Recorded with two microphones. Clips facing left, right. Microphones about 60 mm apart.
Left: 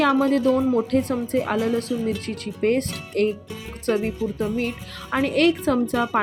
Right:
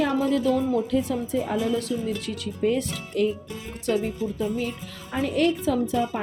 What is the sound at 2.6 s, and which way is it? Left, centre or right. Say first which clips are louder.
Speech: left 3 dB; left.